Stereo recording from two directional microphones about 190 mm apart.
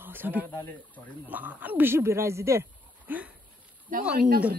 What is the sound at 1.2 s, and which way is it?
Speech, 10° right (ahead or behind).